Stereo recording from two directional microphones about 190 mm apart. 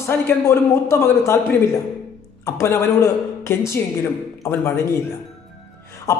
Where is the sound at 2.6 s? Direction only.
15° left (ahead or behind).